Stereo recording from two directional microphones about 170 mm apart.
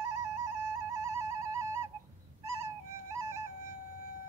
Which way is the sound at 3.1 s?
20° right (ahead or behind).